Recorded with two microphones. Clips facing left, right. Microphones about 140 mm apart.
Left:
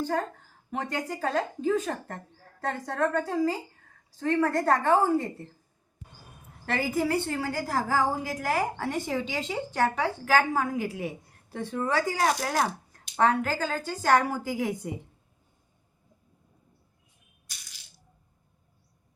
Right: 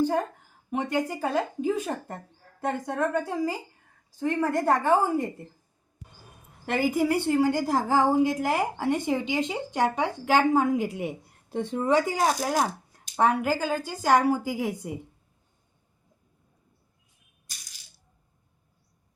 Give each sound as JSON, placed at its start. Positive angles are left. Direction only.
{"t": 0.0, "sound": "a woman's voice", "side_deg": -10}
{"t": 6.7, "sound": "a woman's voice", "side_deg": -15}